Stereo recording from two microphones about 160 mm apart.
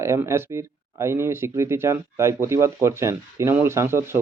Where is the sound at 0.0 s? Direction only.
15° right (ahead or behind).